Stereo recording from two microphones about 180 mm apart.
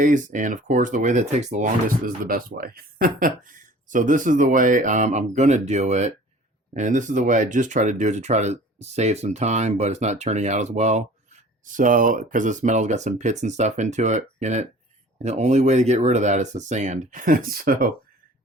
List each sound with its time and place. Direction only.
0.0 s speech: 45° right (ahead or behind)